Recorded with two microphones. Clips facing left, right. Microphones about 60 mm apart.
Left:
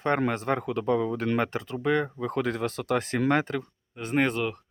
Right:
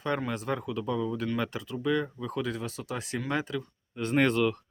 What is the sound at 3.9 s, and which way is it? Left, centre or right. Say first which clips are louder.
Speech: even; centre.